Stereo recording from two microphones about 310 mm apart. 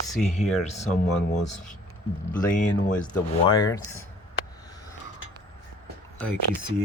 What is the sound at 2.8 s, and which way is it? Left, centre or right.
Speech, centre.